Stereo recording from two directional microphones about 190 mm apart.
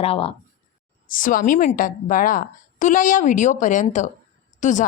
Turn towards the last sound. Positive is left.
turn(degrees=40)  # may be behind; listen again after turning